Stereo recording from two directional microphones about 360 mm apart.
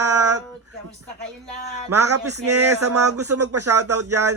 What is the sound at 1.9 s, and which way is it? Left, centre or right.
Speech, right.